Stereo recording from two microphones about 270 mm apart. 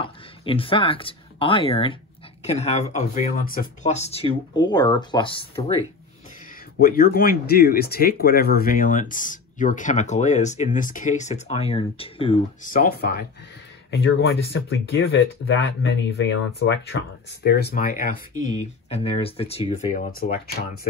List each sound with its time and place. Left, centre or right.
0.0 s speech: centre
6.8 s speech: left